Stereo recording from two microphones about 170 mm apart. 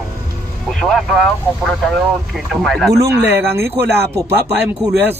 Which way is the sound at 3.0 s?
85° right.